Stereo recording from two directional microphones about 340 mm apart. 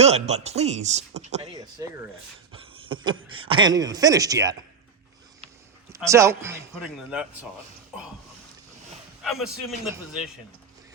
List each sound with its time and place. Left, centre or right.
0.0 s speech: centre
5.9 s a man's voice: centre
9.2 s a man's voice: centre